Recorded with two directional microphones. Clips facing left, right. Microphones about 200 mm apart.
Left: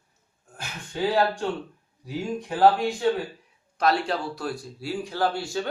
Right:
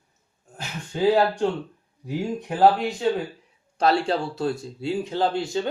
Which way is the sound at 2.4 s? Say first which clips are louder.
Right 1 dB; 20° right (ahead or behind).